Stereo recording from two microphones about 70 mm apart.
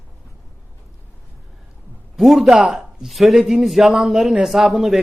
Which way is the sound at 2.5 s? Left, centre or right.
Centre.